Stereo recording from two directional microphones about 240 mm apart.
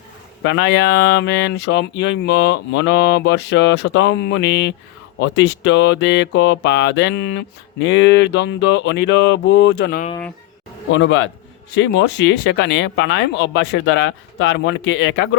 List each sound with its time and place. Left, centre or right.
0.4 s speech: left
10.9 s speech: left